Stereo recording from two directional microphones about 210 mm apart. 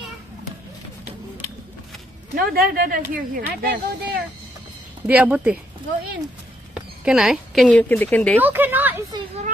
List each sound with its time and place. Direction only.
2.3 s speech: 45° right (ahead or behind)
5.0 s speech: 5° right (ahead or behind)
6.7 s speech: 5° right (ahead or behind)
8.4 s speech: 10° right (ahead or behind)